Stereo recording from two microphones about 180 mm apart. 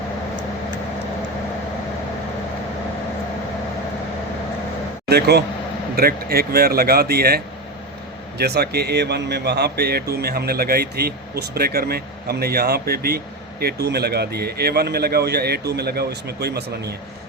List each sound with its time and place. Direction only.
5.0 s a man's voice: 65° right (ahead or behind)